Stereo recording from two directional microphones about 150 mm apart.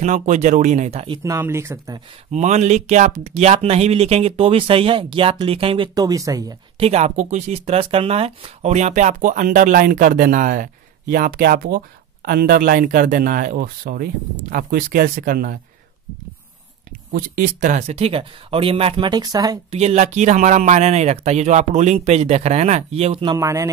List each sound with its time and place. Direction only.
0.0 s speech: 55° right (ahead or behind)
1.2 s speech: 20° right (ahead or behind)
2.3 s speech: 50° right (ahead or behind)
5.9 s speech: 25° right (ahead or behind)
6.8 s speech: 45° right (ahead or behind); by 14.0 s 85° right
14.5 s speech: 70° right (ahead or behind)
17.1 s speech: 60° right (ahead or behind); by 19.6 s 25° right (ahead or behind)
19.7 s speech: 45° right (ahead or behind)
23.3 s speech: 20° right (ahead or behind)